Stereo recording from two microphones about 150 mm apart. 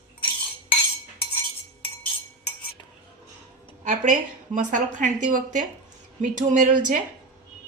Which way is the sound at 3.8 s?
55° right (ahead or behind).